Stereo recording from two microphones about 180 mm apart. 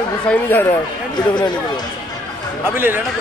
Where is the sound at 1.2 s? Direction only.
25° left (ahead or behind).